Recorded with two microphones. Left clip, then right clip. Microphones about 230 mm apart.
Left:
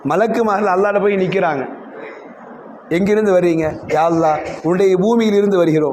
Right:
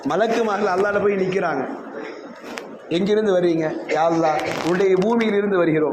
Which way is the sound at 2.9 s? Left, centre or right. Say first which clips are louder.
Left 5 dB; left.